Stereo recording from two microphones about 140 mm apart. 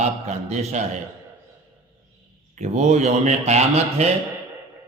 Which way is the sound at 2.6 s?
55° right (ahead or behind).